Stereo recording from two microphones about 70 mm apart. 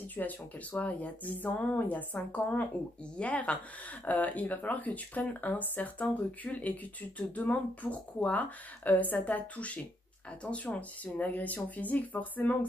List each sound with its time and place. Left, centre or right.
0.1 s speech: left